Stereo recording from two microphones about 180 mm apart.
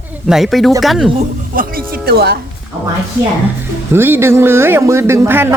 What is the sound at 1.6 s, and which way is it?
Speech, 55° right (ahead or behind).